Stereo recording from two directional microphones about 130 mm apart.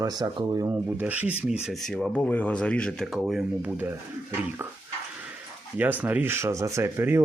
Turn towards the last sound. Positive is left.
turn(degrees=-20)  # may be behind; listen again after turning